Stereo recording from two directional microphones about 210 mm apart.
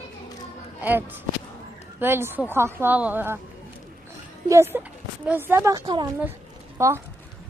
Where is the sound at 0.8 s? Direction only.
10° right (ahead or behind).